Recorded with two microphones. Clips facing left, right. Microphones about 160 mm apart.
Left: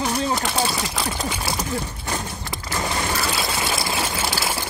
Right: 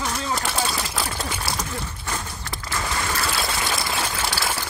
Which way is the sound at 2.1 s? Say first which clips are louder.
Left 3 dB; 20° left (ahead or behind).